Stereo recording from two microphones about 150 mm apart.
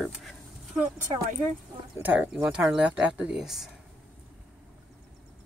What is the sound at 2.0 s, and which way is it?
Speech, 10° right (ahead or behind).